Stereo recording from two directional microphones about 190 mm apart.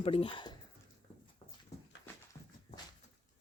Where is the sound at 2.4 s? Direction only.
20° left (ahead or behind).